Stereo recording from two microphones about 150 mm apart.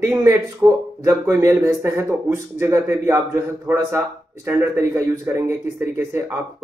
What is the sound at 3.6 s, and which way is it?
Speech, 20° right (ahead or behind).